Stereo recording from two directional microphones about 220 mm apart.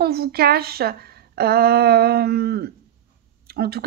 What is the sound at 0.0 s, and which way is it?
Speech, 45° right (ahead or behind).